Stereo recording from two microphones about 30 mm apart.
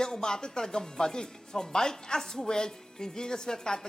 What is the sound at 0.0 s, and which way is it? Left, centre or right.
Speech, centre.